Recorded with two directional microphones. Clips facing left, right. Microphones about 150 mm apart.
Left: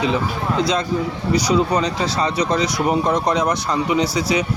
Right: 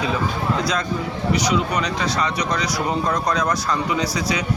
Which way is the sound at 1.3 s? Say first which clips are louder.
Left 4 dB; 35° left (ahead or behind).